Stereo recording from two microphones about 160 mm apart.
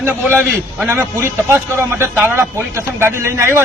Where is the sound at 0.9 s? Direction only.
15° right (ahead or behind).